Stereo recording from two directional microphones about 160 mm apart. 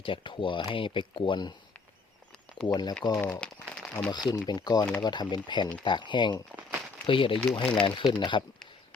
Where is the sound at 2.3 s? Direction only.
5° left (ahead or behind).